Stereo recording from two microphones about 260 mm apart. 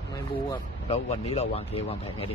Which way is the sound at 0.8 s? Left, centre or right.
Left.